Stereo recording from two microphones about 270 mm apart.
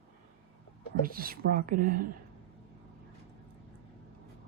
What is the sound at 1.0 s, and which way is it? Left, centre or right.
Speech, right.